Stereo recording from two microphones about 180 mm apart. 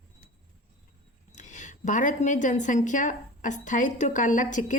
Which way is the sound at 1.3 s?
40° left (ahead or behind).